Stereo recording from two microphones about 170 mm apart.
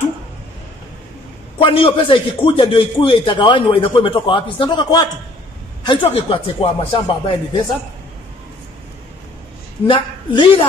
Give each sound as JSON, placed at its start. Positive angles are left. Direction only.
{"t": 1.6, "sound": "a man's voice", "side_deg": 30}
{"t": 9.8, "sound": "a man's voice", "side_deg": 30}